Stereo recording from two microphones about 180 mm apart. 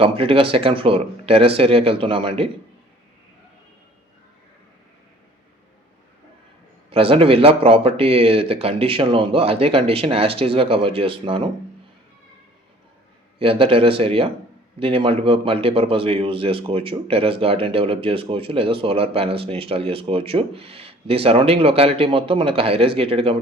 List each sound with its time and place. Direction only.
0.0 s speech: 30° right (ahead or behind)
6.9 s speech: 30° right (ahead or behind)
13.4 s speech: 30° right (ahead or behind)